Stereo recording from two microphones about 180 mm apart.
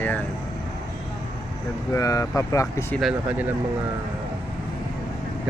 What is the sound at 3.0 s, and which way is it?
Speech, centre (ahead or behind).